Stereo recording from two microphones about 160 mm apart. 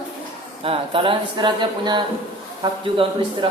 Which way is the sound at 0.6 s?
35° right (ahead or behind).